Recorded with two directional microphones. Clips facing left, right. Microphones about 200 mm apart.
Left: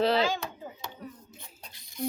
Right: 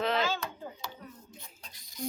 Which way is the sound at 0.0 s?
35° left (ahead or behind).